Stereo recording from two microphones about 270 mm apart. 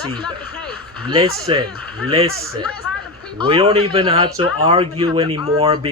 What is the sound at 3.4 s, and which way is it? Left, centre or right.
Speech, centre.